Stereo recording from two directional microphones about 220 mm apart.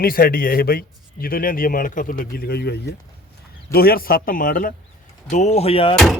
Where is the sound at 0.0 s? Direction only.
40° left (ahead or behind).